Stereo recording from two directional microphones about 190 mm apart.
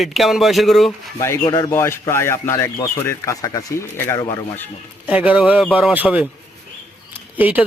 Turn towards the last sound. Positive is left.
turn(degrees=-10)  # may be behind; listen again after turning